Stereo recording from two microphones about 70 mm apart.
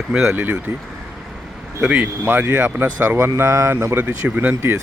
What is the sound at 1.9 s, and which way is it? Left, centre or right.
Speech, right.